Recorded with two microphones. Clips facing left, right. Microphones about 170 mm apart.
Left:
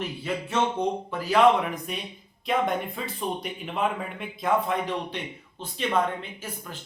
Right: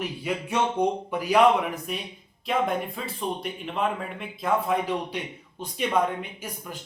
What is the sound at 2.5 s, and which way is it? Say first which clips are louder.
Speech: even; centre (ahead or behind).